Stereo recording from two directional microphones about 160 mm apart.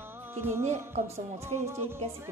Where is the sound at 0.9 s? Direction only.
45° right (ahead or behind).